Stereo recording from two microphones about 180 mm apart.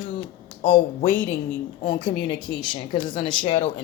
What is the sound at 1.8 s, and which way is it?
Speech, 25° left (ahead or behind).